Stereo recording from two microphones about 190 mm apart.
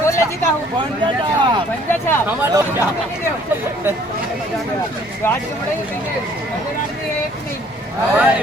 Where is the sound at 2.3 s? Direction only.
10° right (ahead or behind).